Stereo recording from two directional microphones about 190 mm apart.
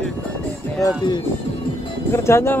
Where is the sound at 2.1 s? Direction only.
15° left (ahead or behind).